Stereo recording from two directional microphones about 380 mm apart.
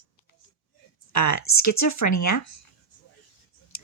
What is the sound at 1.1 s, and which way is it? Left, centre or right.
Speech, left.